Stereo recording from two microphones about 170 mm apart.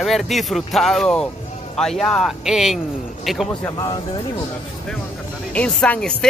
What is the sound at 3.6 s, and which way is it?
Speech, 20° left (ahead or behind).